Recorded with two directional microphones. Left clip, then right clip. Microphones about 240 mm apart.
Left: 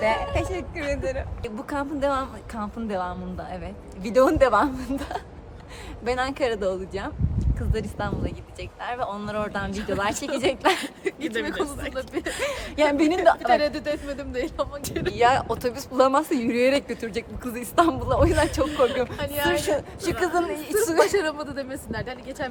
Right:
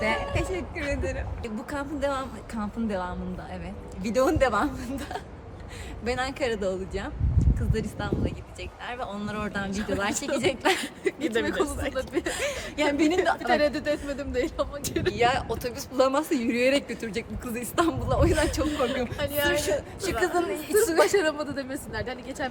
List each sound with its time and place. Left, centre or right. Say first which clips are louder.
0.0 s a woman's voice: left 4 dB; centre
9.7 s speech: left 2 dB; centre
10.0 s a woman's voice: left 2 dB; centre
10.8 s speech: even; centre
12.7 s a woman's voice: left 4 dB; centre
13.4 s speech: left 2 dB; centre
15.1 s a woman's voice: left 5 dB; centre
19.5 s a woman's voice: left 2 dB; centre